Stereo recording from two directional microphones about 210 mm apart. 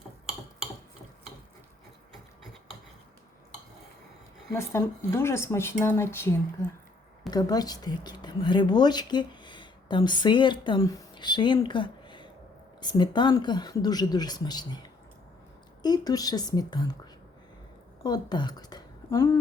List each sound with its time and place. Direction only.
4.5 s speech: 10° left (ahead or behind)